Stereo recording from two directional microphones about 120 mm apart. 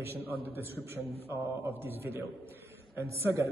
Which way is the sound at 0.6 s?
20° right (ahead or behind).